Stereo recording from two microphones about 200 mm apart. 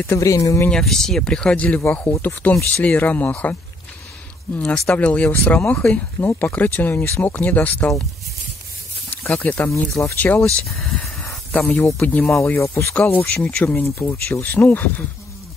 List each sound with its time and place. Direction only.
0.0 s speech: 15° left (ahead or behind)
0.7 s speech: 5° left (ahead or behind)
4.6 s speech: 5° left (ahead or behind)
9.1 s speech: 10° left (ahead or behind)